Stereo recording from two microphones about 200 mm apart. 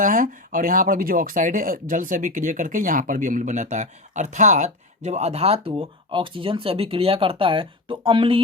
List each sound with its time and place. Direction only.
0.0 s speech: 40° right (ahead or behind); by 8.4 s 25° right (ahead or behind)